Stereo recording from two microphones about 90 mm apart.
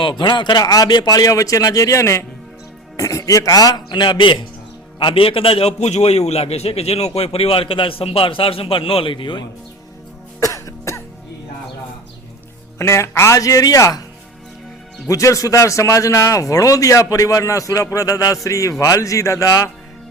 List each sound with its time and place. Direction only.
0.0 s speech: 65° left (ahead or behind)
0.6 s speech: 45° left (ahead or behind); by 4.4 s 65° left (ahead or behind)
4.9 s a man's voice: 80° left
6.6 s a man's voice: 90° left; by 9.4 s 70° left (ahead or behind)
10.4 s music: 35° left (ahead or behind)
12.8 s speech: 30° left (ahead or behind)
15.0 s speech: 35° left (ahead or behind)